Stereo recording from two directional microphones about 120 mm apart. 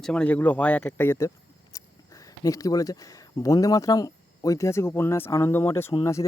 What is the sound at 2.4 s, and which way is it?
Speech, 30° left (ahead or behind).